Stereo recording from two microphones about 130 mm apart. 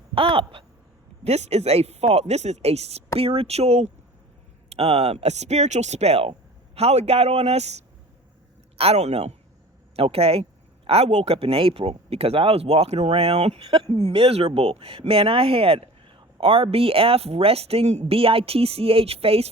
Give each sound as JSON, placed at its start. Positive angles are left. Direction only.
{"t": 0.1, "sound": "speech", "side_deg": -45}
{"t": 1.2, "sound": "speech", "side_deg": -55}
{"t": 8.8, "sound": "speech", "side_deg": -55}